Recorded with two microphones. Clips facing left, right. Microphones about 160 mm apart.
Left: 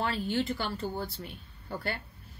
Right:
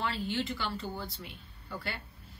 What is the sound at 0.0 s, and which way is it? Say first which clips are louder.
A woman's voice: left 3 dB; 50° left (ahead or behind).